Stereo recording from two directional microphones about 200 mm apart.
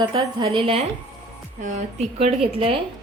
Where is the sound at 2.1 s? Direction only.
30° right (ahead or behind).